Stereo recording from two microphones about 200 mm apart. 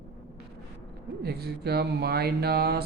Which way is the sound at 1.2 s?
55° right (ahead or behind).